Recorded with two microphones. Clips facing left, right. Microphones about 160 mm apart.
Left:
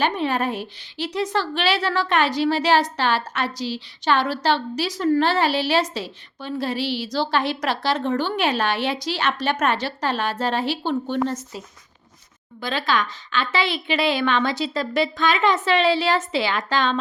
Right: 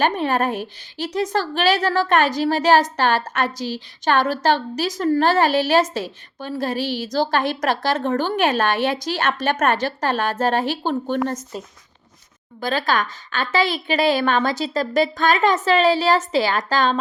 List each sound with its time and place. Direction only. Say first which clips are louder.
0.0 s a woman's voice: right 2 dB; 45° right (ahead or behind)